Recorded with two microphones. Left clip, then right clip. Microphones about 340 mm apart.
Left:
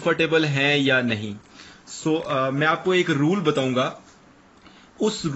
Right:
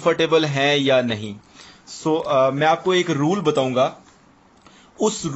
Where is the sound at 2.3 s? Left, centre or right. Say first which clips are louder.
Right 6 dB; centre.